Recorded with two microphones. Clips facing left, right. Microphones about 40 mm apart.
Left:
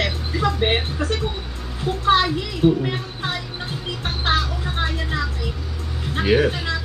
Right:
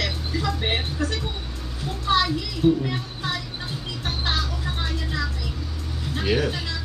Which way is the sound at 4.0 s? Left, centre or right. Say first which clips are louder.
Left 5 dB; left.